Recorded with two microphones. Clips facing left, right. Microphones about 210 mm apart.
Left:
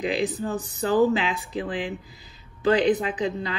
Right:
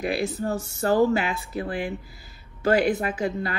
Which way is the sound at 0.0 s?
15° left (ahead or behind).